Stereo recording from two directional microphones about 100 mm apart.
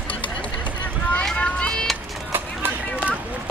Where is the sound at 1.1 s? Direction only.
10° left (ahead or behind).